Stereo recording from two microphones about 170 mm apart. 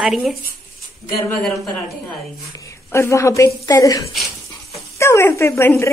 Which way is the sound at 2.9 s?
15° left (ahead or behind).